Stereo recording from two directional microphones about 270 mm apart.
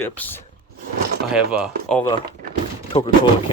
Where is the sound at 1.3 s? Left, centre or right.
Centre.